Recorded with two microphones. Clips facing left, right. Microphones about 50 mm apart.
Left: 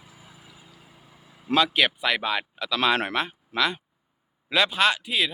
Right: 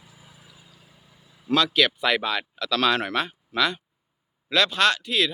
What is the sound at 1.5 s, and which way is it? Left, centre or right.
Speech, centre.